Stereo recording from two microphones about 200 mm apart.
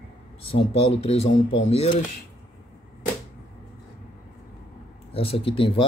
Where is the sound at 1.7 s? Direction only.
30° left (ahead or behind).